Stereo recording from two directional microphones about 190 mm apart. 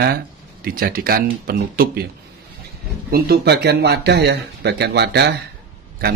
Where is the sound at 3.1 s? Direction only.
55° right (ahead or behind).